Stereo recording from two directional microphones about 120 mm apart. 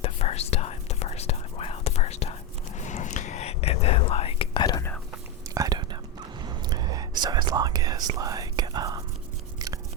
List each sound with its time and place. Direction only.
0.0 s whispering: 60° left (ahead or behind)
2.7 s whispering: 90° left; by 4.6 s 50° left (ahead or behind)
5.5 s whispering: 35° right (ahead or behind)
9.6 s chewing: 30° right (ahead or behind)